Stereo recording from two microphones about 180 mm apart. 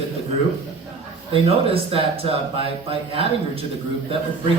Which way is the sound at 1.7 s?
30° right (ahead or behind).